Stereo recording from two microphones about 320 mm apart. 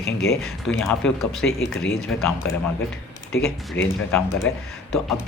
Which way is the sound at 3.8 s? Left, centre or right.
Left.